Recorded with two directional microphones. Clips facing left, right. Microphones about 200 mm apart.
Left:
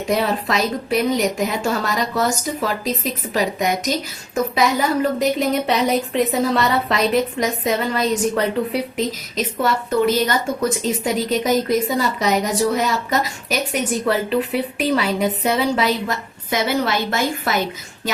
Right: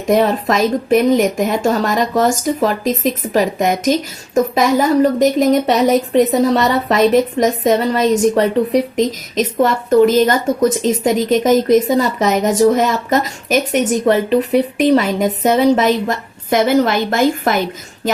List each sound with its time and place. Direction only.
0.1 s a woman's voice: 45° right (ahead or behind)